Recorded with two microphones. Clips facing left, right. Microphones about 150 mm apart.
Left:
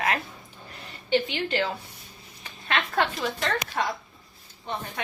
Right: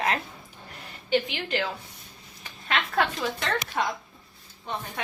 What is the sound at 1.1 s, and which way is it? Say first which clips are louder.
Speech: left 1 dB; centre (ahead or behind).